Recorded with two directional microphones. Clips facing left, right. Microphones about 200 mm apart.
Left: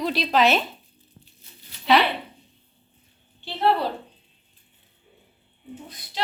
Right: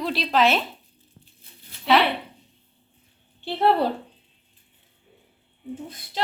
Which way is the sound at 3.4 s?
55° right (ahead or behind).